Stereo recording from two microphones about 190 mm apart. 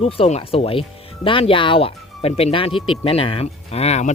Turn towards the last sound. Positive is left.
turn(degrees=35)  # may be behind; listen again after turning